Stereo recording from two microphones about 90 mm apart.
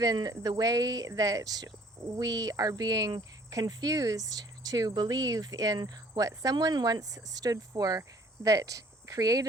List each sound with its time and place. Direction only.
0.0 s speech: 45° right (ahead or behind)